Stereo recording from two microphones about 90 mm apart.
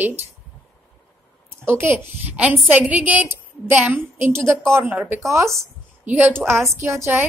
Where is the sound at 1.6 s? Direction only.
25° right (ahead or behind).